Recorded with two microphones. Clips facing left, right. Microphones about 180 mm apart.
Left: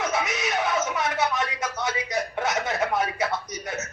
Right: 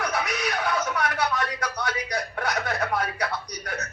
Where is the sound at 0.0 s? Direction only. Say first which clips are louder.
Left 1 dB; 25° left (ahead or behind).